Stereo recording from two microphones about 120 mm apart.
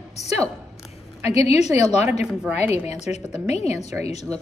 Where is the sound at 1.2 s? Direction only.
65° left (ahead or behind).